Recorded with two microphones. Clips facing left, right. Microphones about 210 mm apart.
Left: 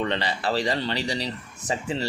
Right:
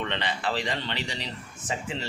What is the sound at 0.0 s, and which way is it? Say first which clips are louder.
A man's voice: left 4 dB; 35° left (ahead or behind).